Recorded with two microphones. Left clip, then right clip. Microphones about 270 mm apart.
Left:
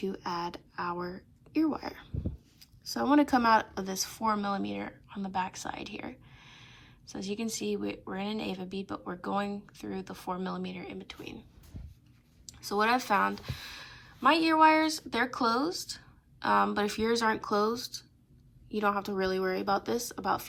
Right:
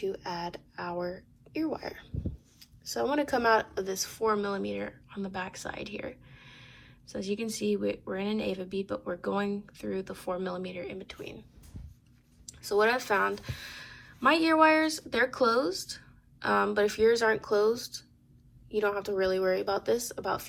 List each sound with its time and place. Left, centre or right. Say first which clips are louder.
0.2 s speech: left 1 dB; left
3.2 s a woman's voice: even; left
12.5 s a woman's voice: right 2 dB; left